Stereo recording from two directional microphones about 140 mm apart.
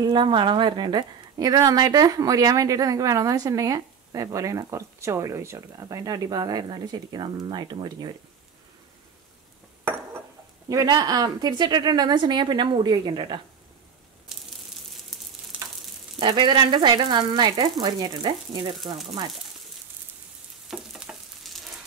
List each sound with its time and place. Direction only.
0.0 s a woman's voice: 35° right (ahead or behind)
10.7 s speech: 25° right (ahead or behind)
14.3 s a sound: 5° right (ahead or behind)
16.2 s speech: 35° right (ahead or behind)
20.6 s frying: centre (ahead or behind)